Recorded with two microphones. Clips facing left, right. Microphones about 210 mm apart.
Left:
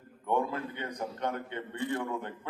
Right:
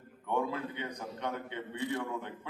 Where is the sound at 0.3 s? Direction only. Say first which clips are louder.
Left 2 dB; 55° left (ahead or behind).